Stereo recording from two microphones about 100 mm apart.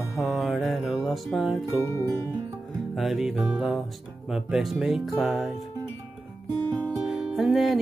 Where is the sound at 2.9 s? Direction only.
Centre (ahead or behind).